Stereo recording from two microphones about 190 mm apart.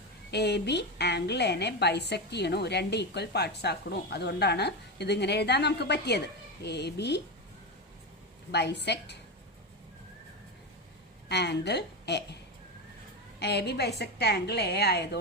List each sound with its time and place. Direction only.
0.3 s a woman's voice: 60° left (ahead or behind)
8.5 s a woman's voice: 60° left (ahead or behind)
11.3 s a woman's voice: 60° left (ahead or behind)
13.4 s a woman's voice: 60° left (ahead or behind)